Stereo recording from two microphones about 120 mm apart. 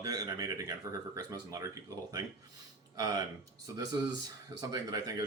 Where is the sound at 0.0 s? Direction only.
30° right (ahead or behind).